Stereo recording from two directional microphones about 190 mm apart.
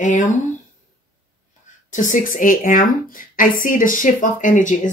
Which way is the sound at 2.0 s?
45° left (ahead or behind).